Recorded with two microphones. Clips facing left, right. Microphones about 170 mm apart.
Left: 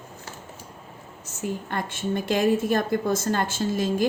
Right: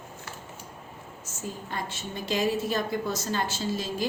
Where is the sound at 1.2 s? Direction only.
60° left (ahead or behind).